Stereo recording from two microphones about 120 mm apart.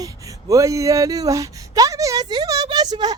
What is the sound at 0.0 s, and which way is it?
Speech, 30° right (ahead or behind).